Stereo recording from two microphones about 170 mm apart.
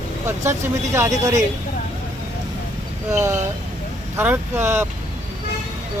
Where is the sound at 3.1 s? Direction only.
15° right (ahead or behind).